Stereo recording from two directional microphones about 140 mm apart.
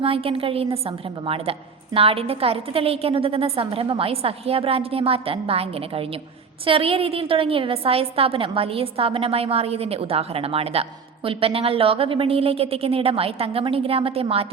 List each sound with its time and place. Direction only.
0.0 s a woman's voice: 40° right (ahead or behind)